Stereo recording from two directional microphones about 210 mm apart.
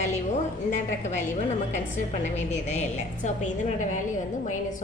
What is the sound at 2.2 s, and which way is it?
A woman's voice, 35° left (ahead or behind).